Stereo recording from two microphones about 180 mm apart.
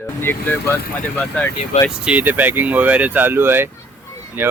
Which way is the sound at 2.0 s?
10° right (ahead or behind).